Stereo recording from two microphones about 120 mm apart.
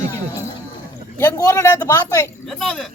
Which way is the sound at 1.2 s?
30° left (ahead or behind).